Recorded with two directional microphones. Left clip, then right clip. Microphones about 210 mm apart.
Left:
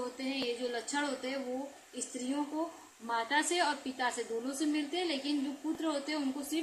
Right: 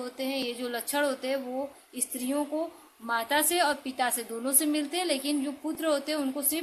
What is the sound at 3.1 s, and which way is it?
A woman's voice, 50° right (ahead or behind).